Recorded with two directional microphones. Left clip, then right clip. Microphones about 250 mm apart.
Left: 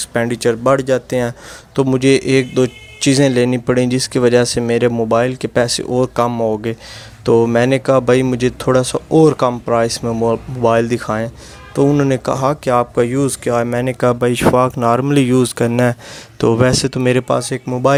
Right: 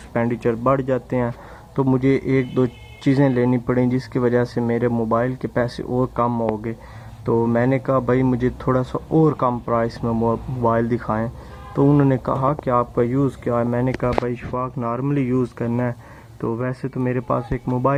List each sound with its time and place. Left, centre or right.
0.1 s speech: left
7.3 s speech: left